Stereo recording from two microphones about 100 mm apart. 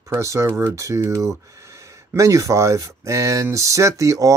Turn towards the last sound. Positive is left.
turn(degrees=-30)  # may be behind; listen again after turning